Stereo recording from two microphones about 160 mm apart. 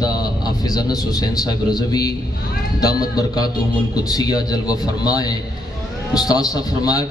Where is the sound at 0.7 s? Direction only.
25° left (ahead or behind).